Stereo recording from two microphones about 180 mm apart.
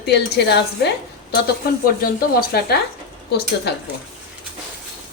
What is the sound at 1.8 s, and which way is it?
A woman's voice, 55° left (ahead or behind).